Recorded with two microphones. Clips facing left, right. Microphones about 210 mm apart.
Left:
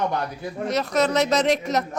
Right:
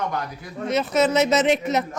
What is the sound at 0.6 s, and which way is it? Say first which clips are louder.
A woman's voice: right 2 dB; centre (ahead or behind).